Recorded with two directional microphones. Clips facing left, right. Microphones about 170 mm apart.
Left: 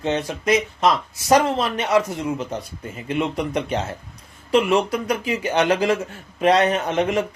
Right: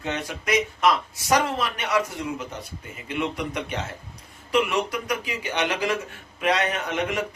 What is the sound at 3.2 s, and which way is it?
Speech, 30° left (ahead or behind).